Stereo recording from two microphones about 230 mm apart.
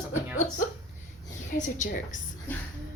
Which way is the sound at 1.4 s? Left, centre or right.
Left.